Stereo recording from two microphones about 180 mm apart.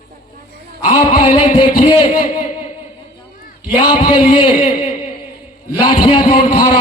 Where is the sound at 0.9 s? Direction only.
50° left (ahead or behind).